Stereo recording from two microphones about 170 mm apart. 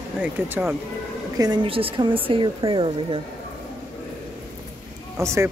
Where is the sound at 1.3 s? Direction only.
25° right (ahead or behind).